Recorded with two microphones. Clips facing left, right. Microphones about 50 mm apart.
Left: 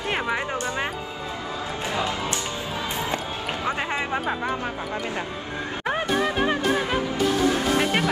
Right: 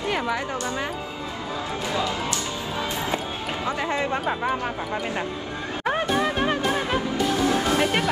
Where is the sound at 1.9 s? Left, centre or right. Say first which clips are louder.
Even; left.